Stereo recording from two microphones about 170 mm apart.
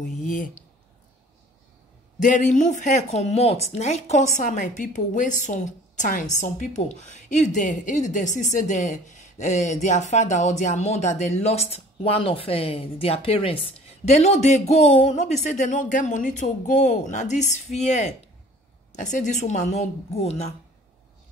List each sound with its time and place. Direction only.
0.0 s speech: 50° left (ahead or behind)
2.1 s speech: 50° left (ahead or behind)